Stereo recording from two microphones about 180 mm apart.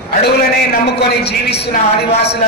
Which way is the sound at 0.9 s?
65° left (ahead or behind).